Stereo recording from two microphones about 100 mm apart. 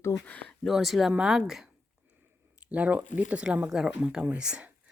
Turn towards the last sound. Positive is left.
turn(degrees=-10)  # may be behind; listen again after turning